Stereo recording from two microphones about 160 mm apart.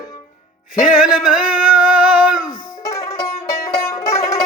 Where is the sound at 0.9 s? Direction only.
5° right (ahead or behind).